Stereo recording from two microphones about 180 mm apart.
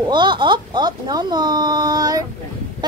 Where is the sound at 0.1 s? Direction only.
25° right (ahead or behind).